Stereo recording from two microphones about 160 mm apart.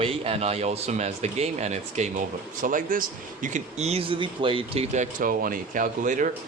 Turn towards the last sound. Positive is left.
turn(degrees=-55)  # may be behind; listen again after turning